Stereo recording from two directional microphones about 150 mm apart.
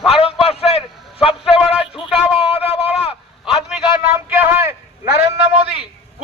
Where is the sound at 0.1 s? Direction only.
40° left (ahead or behind).